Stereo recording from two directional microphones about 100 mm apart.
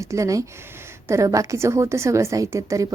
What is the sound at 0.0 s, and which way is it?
A woman's voice, 30° right (ahead or behind).